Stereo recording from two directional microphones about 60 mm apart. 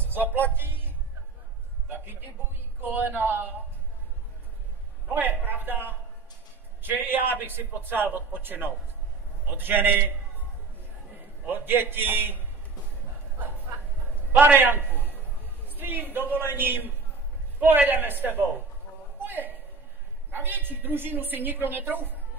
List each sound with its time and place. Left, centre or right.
0.1 s music: right
1.9 s a sound: right
2.8 s a man's voice: right
5.1 s a man's voice: right
11.4 s a man's voice: right
14.4 s a man's voice: right
19.1 s a sound: right
20.2 s a man's voice: right